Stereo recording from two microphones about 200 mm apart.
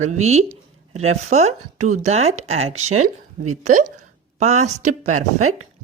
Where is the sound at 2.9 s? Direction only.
90° right.